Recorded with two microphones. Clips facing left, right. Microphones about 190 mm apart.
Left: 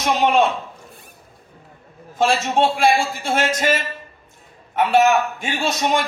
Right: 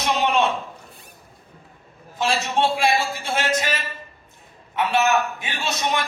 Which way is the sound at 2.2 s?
50° left (ahead or behind).